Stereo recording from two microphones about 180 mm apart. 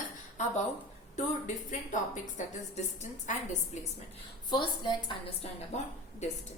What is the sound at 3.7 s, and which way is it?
Speech, 40° left (ahead or behind).